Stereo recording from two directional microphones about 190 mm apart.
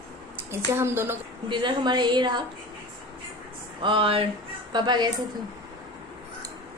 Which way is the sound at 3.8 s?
25° right (ahead or behind).